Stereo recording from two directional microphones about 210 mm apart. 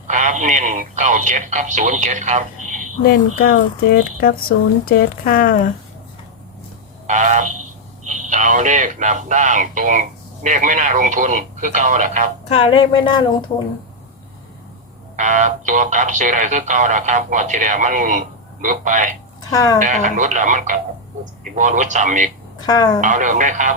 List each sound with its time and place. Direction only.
0.1 s speech: 35° right (ahead or behind)
3.0 s speech: 45° left (ahead or behind)
7.1 s speech: 35° right (ahead or behind)
12.5 s speech: 25° left (ahead or behind)
15.1 s speech: 35° right (ahead or behind)
19.4 s speech: 15° left (ahead or behind)
19.8 s speech: 35° right (ahead or behind)
22.5 s speech: 20° left (ahead or behind)
23.0 s speech: 35° right (ahead or behind)